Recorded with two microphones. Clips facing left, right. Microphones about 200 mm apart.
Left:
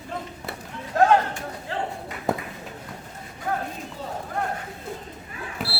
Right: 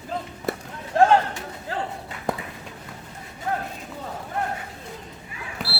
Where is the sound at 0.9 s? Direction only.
30° right (ahead or behind).